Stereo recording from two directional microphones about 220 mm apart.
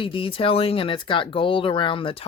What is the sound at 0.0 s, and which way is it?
Speech, 25° left (ahead or behind).